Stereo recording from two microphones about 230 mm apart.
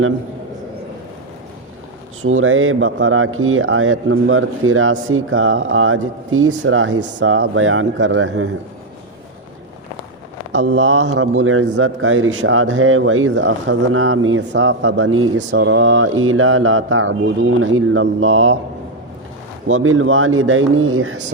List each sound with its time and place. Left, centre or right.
2.2 s a man's voice: right
10.5 s a man's voice: right
19.6 s a man's voice: right